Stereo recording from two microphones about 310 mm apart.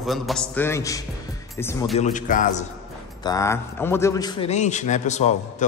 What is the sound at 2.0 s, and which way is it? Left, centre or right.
Speech, left.